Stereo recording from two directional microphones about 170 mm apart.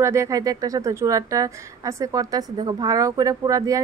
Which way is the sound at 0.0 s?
15° right (ahead or behind).